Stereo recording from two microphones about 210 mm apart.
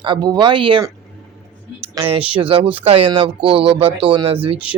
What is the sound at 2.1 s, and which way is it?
Speech, 25° right (ahead or behind).